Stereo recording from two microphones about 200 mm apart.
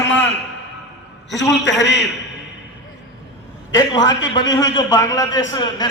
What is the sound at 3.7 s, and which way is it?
A man's voice, 20° left (ahead or behind).